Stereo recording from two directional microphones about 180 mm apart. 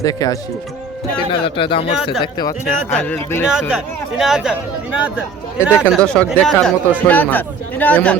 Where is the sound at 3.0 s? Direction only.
10° left (ahead or behind).